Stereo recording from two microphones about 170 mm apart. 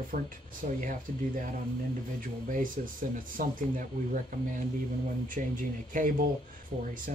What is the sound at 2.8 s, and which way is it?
Speech, 50° right (ahead or behind).